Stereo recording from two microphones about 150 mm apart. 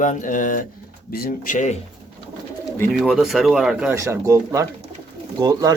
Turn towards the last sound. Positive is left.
turn(degrees=-25)  # may be behind; listen again after turning